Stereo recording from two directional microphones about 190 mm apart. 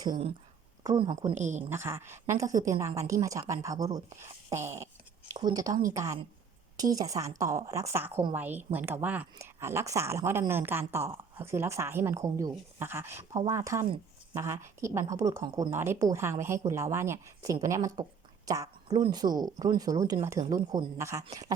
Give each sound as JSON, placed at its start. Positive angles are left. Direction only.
{"t": 0.0, "sound": "a woman's voice", "side_deg": -25}
{"t": 1.7, "sound": "a woman's voice", "side_deg": -15}